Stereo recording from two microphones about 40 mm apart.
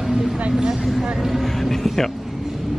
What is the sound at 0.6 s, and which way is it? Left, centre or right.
Speech, centre.